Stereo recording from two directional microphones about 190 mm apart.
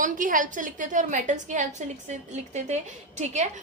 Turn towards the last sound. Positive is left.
turn(degrees=-35)  # may be behind; listen again after turning